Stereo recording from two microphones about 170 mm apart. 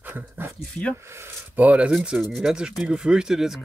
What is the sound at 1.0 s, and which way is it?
Speech, 15° right (ahead or behind).